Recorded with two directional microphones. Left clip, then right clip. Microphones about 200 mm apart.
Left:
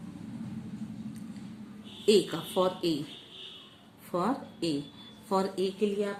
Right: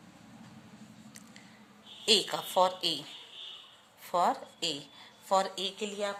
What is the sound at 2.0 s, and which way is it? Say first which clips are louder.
Speech: left 2 dB; 45° right (ahead or behind).